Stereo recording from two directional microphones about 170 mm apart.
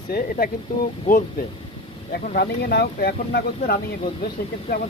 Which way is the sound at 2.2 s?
65° left (ahead or behind).